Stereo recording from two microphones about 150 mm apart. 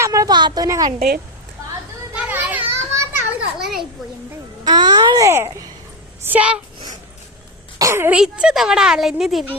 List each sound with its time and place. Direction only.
0.0 s a sound: 20° right (ahead or behind)
0.9 s speech: 90° right
2.1 s children playing: 10° right (ahead or behind)
3.6 s children playing: centre (ahead or behind)
4.6 s a child's voice: 30° right (ahead or behind); by 6.6 s 10° right (ahead or behind)
7.8 s speech: 20° right (ahead or behind)
8.2 s speech: 5° right (ahead or behind)